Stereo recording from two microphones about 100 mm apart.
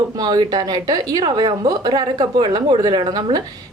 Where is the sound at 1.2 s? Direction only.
50° right (ahead or behind).